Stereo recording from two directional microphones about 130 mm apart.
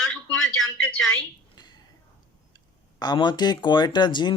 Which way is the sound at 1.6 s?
35° left (ahead or behind).